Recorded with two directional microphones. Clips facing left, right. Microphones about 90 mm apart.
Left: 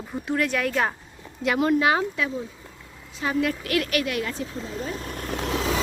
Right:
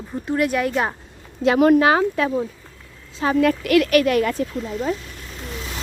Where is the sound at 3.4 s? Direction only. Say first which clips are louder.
Right 9 dB; 70° right (ahead or behind).